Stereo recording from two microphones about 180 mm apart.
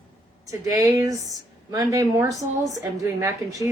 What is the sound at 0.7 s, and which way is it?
A woman's voice, 20° right (ahead or behind).